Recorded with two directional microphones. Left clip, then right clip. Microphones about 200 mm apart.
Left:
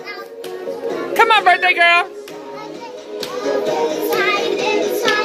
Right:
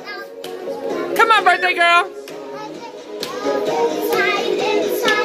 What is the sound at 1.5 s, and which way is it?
Speech, 15° right (ahead or behind).